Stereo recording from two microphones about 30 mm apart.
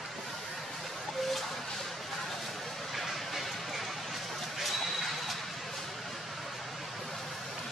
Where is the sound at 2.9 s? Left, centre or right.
Centre.